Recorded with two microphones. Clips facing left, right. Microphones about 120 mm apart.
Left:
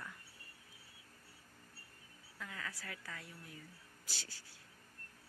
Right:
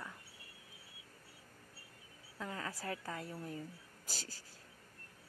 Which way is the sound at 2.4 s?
35° right (ahead or behind).